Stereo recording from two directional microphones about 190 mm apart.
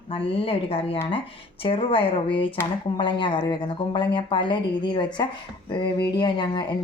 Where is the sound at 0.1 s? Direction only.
30° left (ahead or behind).